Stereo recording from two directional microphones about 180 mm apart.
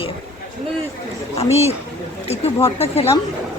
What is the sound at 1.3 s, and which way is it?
Speech, 35° left (ahead or behind).